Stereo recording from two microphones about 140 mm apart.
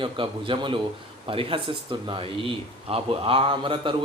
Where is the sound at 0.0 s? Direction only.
35° right (ahead or behind).